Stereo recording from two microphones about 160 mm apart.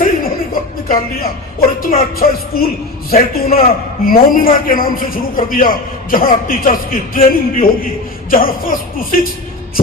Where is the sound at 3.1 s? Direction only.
70° left (ahead or behind).